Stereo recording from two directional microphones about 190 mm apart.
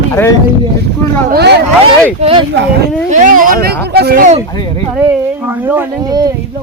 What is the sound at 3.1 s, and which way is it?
Speech, 40° right (ahead or behind).